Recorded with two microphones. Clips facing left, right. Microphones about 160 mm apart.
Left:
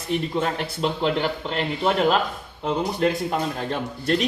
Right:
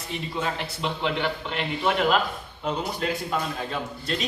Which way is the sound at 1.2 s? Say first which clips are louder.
Left 3 dB; 40° left (ahead or behind).